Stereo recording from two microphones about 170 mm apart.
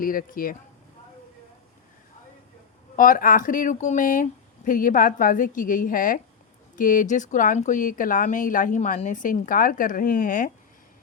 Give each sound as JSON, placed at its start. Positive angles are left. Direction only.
{"t": 0.0, "sound": "speech", "side_deg": 55}
{"t": 2.9, "sound": "speech", "side_deg": 55}